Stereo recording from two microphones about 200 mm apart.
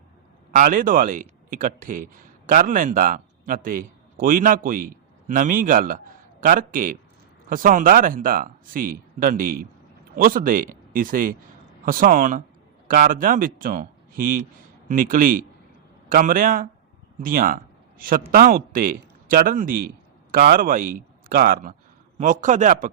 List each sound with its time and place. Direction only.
0.5 s a man's voice: 45° right (ahead or behind)